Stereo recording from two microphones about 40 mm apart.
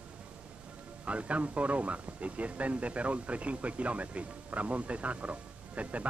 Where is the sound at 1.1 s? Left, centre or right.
Right.